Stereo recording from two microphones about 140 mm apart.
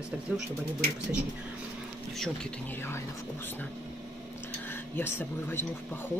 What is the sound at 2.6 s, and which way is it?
Speech, 15° left (ahead or behind).